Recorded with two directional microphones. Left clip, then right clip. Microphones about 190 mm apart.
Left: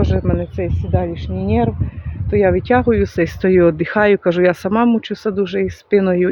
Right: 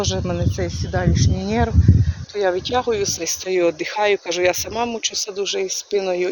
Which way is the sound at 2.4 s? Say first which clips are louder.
Left 5 dB; 35° left (ahead or behind).